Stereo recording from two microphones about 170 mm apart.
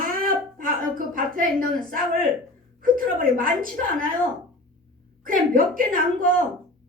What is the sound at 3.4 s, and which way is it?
Speech, 55° right (ahead or behind).